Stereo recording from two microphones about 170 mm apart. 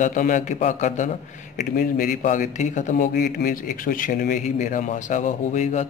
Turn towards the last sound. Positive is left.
turn(degrees=45)  # may be behind; listen again after turning